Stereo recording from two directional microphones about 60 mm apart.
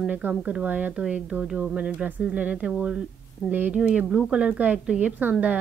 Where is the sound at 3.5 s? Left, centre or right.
Right.